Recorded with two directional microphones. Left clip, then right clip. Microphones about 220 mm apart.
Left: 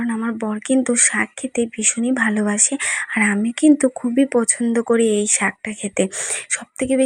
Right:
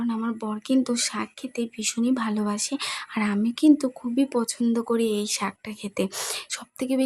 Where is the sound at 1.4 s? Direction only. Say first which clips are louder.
Left 9 dB; centre (ahead or behind).